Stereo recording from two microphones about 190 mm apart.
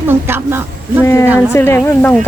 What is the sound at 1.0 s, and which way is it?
Speech, 15° left (ahead or behind).